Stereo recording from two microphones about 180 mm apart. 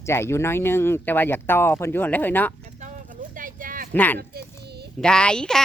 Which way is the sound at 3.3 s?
50° right (ahead or behind).